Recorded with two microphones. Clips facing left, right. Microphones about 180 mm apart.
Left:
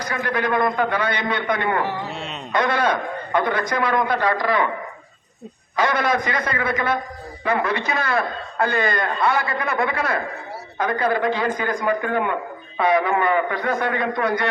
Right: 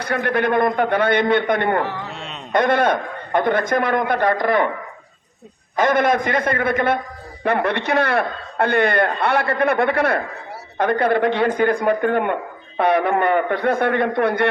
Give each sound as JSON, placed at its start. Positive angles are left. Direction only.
{"t": 0.0, "sound": "speech", "side_deg": -60}
{"t": 2.0, "sound": "wail", "side_deg": 0}
{"t": 2.5, "sound": "a man's voice", "side_deg": -50}
{"t": 5.7, "sound": "a man's voice", "side_deg": -50}